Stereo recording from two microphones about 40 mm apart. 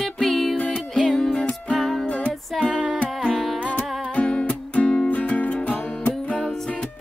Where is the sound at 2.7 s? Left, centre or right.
Centre.